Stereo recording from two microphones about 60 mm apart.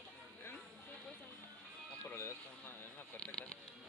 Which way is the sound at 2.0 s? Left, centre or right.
Left.